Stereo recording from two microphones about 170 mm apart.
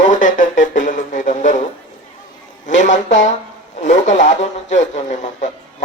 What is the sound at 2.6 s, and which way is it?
Speech, 45° left (ahead or behind).